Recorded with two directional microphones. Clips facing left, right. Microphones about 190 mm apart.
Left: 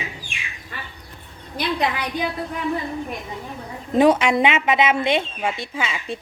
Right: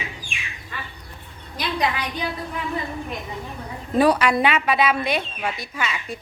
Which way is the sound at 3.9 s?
20° left (ahead or behind).